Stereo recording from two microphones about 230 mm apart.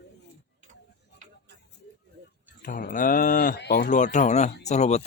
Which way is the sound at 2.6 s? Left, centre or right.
Left.